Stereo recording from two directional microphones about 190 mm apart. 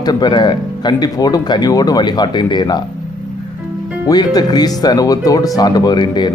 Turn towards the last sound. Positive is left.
turn(degrees=25)  # may be behind; listen again after turning